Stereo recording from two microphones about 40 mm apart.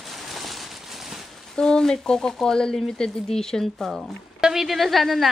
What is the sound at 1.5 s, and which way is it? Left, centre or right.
Speech, centre.